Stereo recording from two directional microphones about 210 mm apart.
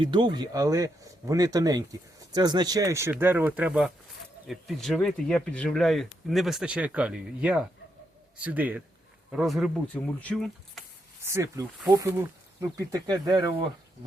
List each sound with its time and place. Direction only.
0.0 s speech: 20° right (ahead or behind); by 10.8 s centre (ahead or behind)
11.3 s speech: 10° right (ahead or behind)